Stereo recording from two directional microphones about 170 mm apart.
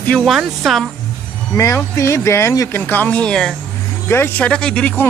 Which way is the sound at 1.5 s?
15° left (ahead or behind).